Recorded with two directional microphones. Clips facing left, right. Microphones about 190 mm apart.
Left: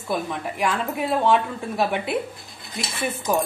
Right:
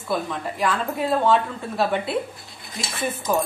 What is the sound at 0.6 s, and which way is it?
Speech, 15° left (ahead or behind).